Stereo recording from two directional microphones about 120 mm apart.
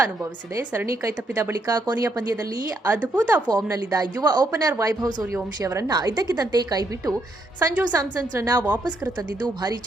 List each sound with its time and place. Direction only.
0.5 s speech: 25° right (ahead or behind)
2.8 s speech: 15° right (ahead or behind)
3.5 s a woman's voice: 30° right (ahead or behind)
8.5 s speech: 15° right (ahead or behind)
9.4 s a woman's voice: 35° right (ahead or behind)